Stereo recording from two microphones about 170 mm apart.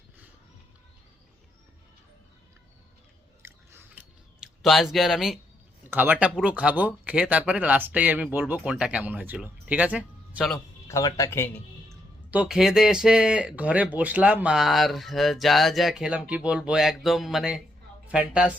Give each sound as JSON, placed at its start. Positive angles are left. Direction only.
{"t": 3.4, "sound": "chewing", "side_deg": -15}
{"t": 5.9, "sound": "speech", "side_deg": -10}
{"t": 10.5, "sound": "speech", "side_deg": 15}
{"t": 12.3, "sound": "speech", "side_deg": -5}